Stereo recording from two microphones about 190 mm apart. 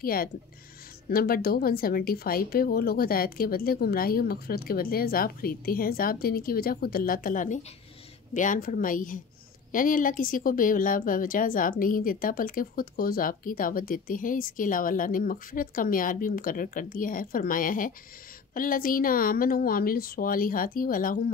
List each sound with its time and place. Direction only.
0.0 s a woman's voice: 50° left (ahead or behind)